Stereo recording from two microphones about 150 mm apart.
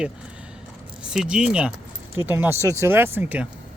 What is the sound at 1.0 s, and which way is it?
Speech, 5° right (ahead or behind).